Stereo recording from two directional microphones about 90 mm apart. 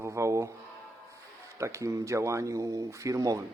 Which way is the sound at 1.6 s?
35° right (ahead or behind).